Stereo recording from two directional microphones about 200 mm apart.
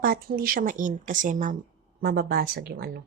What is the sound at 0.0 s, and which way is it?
Speech, 45° right (ahead or behind).